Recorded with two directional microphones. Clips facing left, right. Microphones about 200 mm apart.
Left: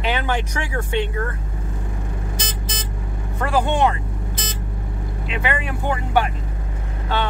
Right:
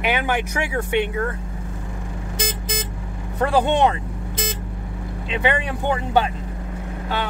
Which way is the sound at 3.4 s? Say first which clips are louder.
Right 2 dB; 20° right (ahead or behind).